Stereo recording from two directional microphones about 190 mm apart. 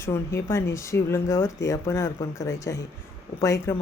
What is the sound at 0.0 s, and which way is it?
Speech, 15° left (ahead or behind).